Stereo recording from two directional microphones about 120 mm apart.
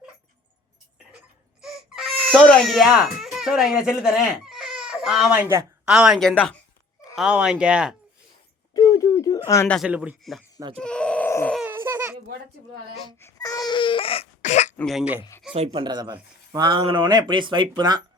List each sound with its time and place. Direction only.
1.6 s baby cry: 5° left (ahead or behind)
5.4 s speech: 20° right (ahead or behind)
5.8 s speech: 5° right (ahead or behind)
8.7 s a sound: 30° left (ahead or behind)
9.8 s speech: 10° right (ahead or behind)
10.8 s a sound: 10° left (ahead or behind)
11.6 s baby cry: 20° right (ahead or behind)
13.1 s baby cry: 25° left (ahead or behind); by 14.3 s 50° left (ahead or behind)
14.4 s throat clearing: 75° left (ahead or behind)
15.5 s speech: 60° right (ahead or behind)
15.8 s speech: 35° right (ahead or behind)